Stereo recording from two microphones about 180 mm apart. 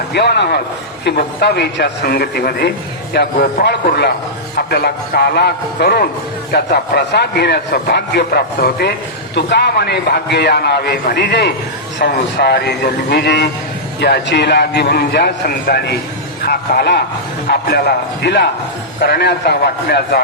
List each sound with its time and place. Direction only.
0.1 s a man's voice: 65° left (ahead or behind)